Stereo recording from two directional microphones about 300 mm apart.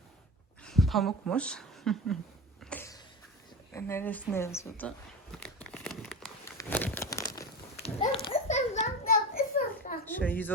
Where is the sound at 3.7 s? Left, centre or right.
Centre.